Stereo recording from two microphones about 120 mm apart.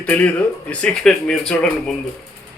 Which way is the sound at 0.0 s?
15° left (ahead or behind).